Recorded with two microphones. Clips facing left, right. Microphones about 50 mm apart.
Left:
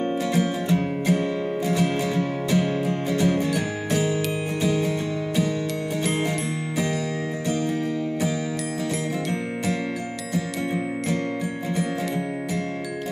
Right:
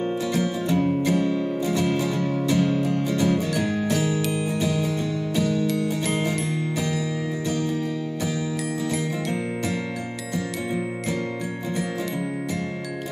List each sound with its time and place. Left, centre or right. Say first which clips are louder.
0.3 s music: left 1 dB; centre
5.3 s music: right 1 dB; centre